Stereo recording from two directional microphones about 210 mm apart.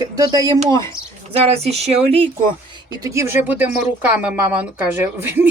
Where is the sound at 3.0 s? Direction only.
15° right (ahead or behind).